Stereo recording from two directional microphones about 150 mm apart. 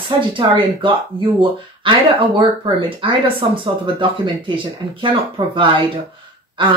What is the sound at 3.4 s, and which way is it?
Speech, 35° right (ahead or behind).